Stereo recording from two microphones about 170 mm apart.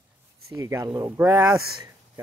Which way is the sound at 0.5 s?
15° right (ahead or behind).